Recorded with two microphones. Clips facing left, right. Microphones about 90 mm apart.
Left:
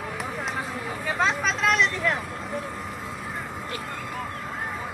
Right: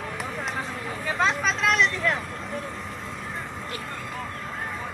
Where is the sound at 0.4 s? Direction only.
5° left (ahead or behind).